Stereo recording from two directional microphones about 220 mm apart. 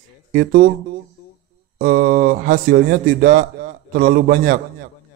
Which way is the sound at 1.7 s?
40° right (ahead or behind).